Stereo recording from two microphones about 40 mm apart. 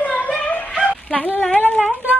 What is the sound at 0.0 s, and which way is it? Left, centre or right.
Music, left.